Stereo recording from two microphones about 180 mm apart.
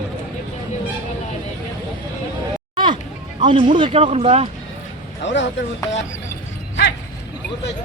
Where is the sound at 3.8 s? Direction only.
35° right (ahead or behind).